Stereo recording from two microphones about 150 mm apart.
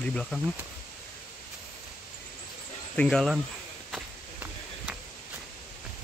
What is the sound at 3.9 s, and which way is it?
Walk, 10° right (ahead or behind).